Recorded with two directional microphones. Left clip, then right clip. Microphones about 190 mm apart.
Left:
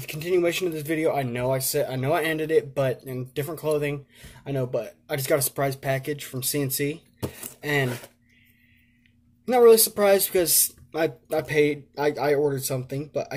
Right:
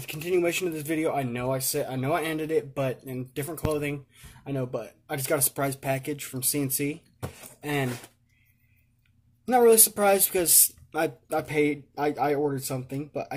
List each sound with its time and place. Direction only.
0.0 s speech: 10° right (ahead or behind)
9.5 s speech: 15° right (ahead or behind)